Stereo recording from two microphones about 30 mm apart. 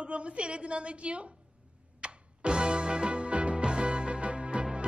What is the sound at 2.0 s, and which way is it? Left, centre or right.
Music, right.